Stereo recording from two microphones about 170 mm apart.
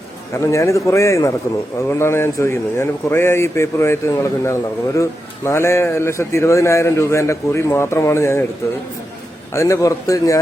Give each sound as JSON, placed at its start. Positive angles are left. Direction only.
{"t": 0.3, "sound": "a man's voice", "side_deg": 20}
{"t": 9.5, "sound": "a man's voice", "side_deg": 15}